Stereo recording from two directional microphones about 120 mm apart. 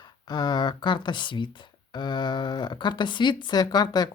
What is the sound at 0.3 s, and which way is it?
Speech, 35° left (ahead or behind).